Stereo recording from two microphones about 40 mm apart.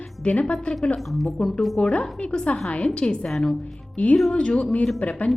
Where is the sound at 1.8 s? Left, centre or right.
Left.